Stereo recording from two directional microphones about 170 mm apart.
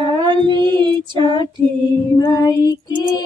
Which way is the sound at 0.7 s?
30° right (ahead or behind).